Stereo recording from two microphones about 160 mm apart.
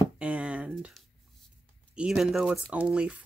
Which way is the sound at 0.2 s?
5° right (ahead or behind).